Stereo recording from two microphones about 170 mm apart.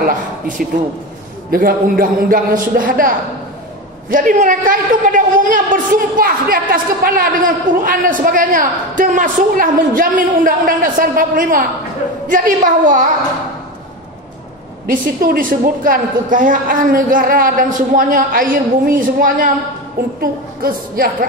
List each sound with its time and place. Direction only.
0.0 s a woman's voice: 55° right (ahead or behind)
14.9 s a woman's voice: 55° right (ahead or behind)